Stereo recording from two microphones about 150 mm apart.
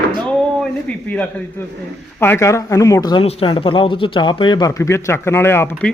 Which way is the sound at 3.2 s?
35° left (ahead or behind).